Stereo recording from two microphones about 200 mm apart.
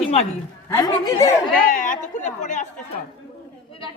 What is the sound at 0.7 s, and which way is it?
Speech, 15° left (ahead or behind).